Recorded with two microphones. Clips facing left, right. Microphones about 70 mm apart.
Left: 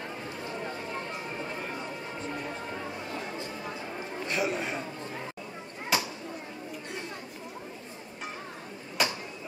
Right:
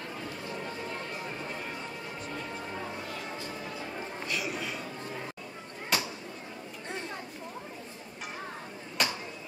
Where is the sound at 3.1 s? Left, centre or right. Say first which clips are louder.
Left 2 dB; left.